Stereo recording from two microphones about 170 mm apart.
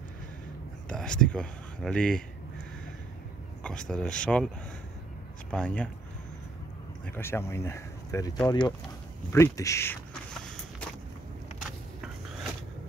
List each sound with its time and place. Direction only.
0.8 s speech: 5° left (ahead or behind)
3.9 s speech: 5° left (ahead or behind)
5.5 s speech: 5° left (ahead or behind)
7.1 s speech: 15° left (ahead or behind)